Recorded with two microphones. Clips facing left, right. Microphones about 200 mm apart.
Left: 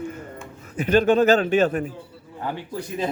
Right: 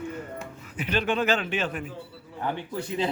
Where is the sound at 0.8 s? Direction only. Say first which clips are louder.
Left 9 dB; 45° left (ahead or behind).